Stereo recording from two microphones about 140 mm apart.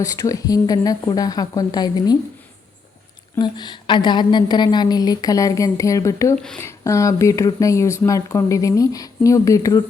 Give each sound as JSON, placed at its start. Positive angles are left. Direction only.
{"t": 0.0, "sound": "speech", "side_deg": 25}
{"t": 3.3, "sound": "speech", "side_deg": 30}
{"t": 6.3, "sound": "speech", "side_deg": 5}
{"t": 6.6, "sound": "speech", "side_deg": 20}